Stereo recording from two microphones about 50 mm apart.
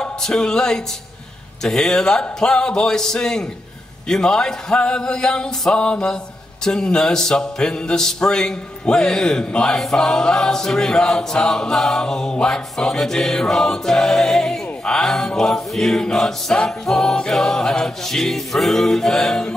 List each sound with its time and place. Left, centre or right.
0.0 s music: centre
1.6 s choir: centre
5.7 s mantra: left
6.6 s choir: centre